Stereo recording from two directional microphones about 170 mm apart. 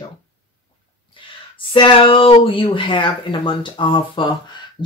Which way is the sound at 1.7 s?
30° left (ahead or behind).